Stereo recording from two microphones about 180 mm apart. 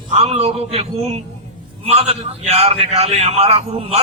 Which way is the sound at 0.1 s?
35° right (ahead or behind).